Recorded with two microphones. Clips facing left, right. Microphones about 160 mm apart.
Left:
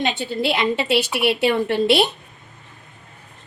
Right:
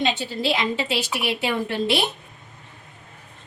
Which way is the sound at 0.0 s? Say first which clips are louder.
Left 2 dB; 60° left (ahead or behind).